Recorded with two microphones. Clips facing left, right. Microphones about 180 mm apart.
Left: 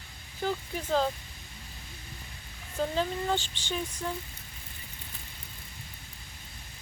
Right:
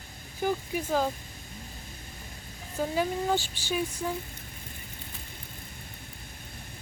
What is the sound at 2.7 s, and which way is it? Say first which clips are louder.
Speech: right 1 dB; 10° right (ahead or behind).